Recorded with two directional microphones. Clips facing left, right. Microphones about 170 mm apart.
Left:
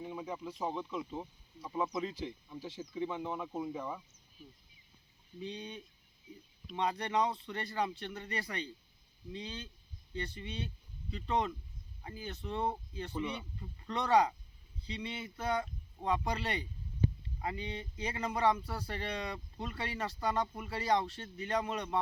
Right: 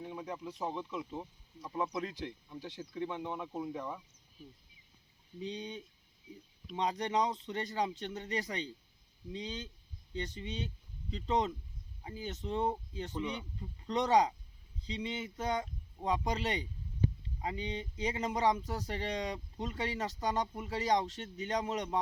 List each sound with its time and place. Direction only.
0.0 s speech: 5° left (ahead or behind)
5.4 s speech: 20° right (ahead or behind)
13.1 s speech: 5° left (ahead or behind)
13.6 s speech: 20° right (ahead or behind)